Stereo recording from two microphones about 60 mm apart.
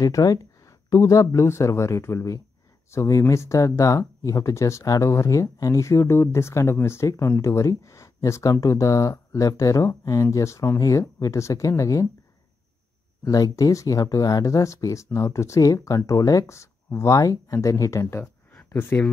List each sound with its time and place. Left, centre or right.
0.0 s speech: left
10.3 s speech: left
10.8 s speech: left
13.2 s speech: left
15.6 s speech: left
16.1 s speech: left
18.2 s a sound: left
18.7 s speech: left